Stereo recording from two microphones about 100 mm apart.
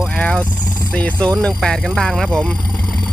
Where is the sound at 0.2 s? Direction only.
10° left (ahead or behind).